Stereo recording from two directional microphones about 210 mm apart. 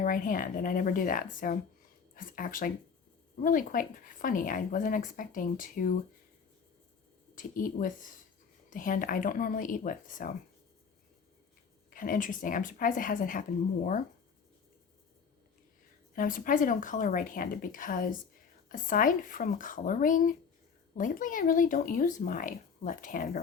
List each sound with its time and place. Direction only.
0.0 s speech: 40° left (ahead or behind)
7.3 s speech: 40° left (ahead or behind)
11.9 s speech: 40° left (ahead or behind)
16.1 s speech: 40° left (ahead or behind)